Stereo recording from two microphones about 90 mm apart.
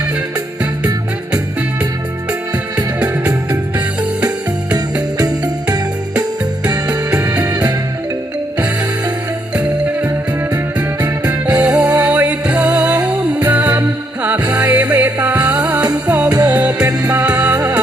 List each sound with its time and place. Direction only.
2.7 s music: 45° right (ahead or behind)
7.3 s music: 45° right (ahead or behind)
11.0 s music: 45° right (ahead or behind)
11.4 s music: 15° right (ahead or behind)
15.8 s music: 45° right (ahead or behind)
16.5 s music: 15° right (ahead or behind)
17.5 s music: 40° right (ahead or behind)